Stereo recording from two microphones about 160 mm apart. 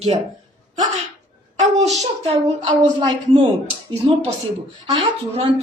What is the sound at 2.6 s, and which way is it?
Speech, 30° right (ahead or behind).